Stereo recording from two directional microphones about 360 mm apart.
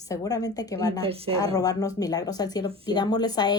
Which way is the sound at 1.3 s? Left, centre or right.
Centre.